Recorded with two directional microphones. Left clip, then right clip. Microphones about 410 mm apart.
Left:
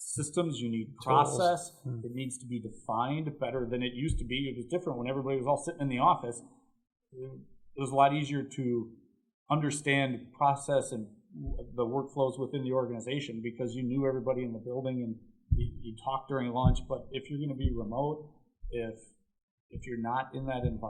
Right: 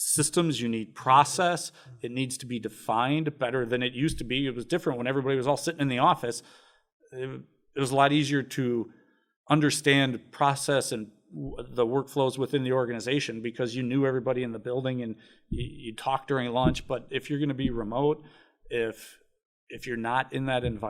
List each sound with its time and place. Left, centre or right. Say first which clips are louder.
0.2 s speech: right 5 dB; right
7.8 s speech: right 3 dB; right
16.0 s speech: right 6 dB; right